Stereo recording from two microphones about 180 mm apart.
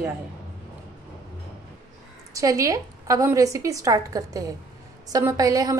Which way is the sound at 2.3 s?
20° right (ahead or behind).